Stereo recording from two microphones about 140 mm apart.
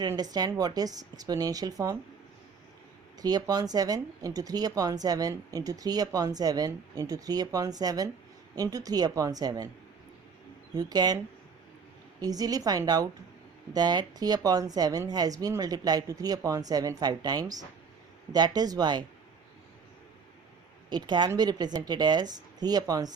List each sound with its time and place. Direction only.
0.1 s speech: 25° right (ahead or behind)
3.2 s speech: 30° right (ahead or behind)
10.8 s speech: 30° right (ahead or behind)
12.2 s speech: 25° right (ahead or behind)
20.9 s speech: 30° right (ahead or behind)